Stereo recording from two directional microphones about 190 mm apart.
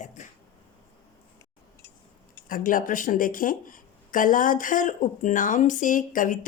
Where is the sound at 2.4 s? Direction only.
45° left (ahead or behind).